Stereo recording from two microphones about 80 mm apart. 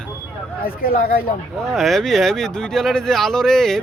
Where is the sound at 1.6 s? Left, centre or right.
Centre.